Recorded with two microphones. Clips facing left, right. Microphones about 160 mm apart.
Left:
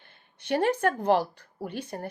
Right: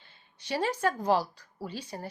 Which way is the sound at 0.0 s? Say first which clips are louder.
Left 2 dB; 55° left (ahead or behind).